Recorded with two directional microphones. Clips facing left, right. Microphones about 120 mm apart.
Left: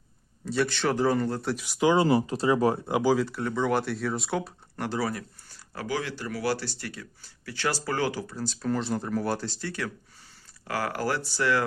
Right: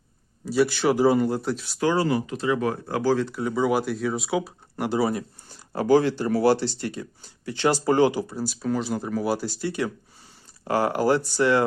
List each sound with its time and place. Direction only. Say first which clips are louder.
0.4 s speech: right 5 dB; 5° right (ahead or behind)
1.4 s speech: right 2 dB; centre (ahead or behind)
1.6 s speech: left 2 dB; 15° left (ahead or behind)
2.0 s speech: left 1 dB; 30° left (ahead or behind)
2.8 s speech: right 1 dB; 15° left (ahead or behind)
3.4 s speech: right 3 dB; 5° right (ahead or behind)
5.8 s speech: right 12 dB; 30° right (ahead or behind)